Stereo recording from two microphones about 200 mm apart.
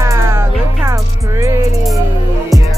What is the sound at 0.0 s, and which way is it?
Music, 15° right (ahead or behind).